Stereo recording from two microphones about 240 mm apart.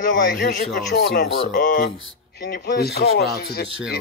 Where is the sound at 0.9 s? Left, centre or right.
Left.